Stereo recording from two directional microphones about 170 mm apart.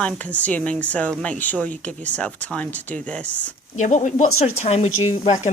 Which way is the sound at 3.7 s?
45° left (ahead or behind).